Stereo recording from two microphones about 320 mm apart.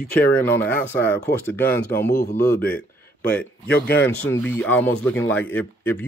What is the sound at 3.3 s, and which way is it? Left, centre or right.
Speech, left.